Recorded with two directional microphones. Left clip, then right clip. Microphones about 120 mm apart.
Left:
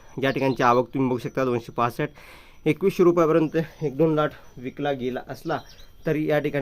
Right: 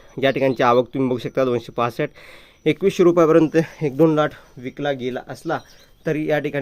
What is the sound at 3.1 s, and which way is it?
A man's voice, 50° right (ahead or behind).